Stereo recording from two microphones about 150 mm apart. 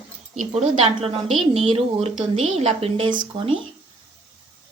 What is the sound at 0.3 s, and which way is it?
Speech, 50° right (ahead or behind).